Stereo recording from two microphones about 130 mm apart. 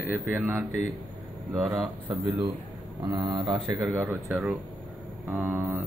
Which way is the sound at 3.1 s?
35° right (ahead or behind).